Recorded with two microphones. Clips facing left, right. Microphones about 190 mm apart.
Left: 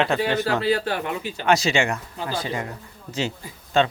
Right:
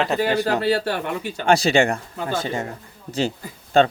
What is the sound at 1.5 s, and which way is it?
Speech, 30° right (ahead or behind).